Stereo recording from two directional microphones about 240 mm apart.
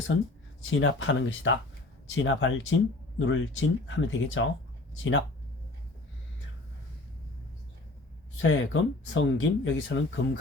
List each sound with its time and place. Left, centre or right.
0.6 s speech: left
8.4 s speech: left